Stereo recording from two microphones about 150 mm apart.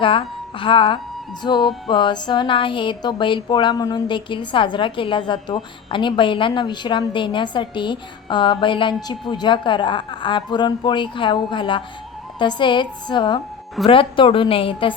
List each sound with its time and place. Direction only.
0.0 s speech: 35° left (ahead or behind)
1.4 s music: 30° left (ahead or behind)